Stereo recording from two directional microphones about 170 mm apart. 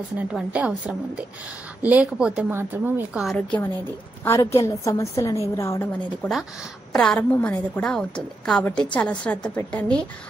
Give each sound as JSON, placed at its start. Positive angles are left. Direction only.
{"t": 0.3, "sound": "a woman's voice", "side_deg": -5}
{"t": 3.3, "sound": "a woman's voice", "side_deg": 5}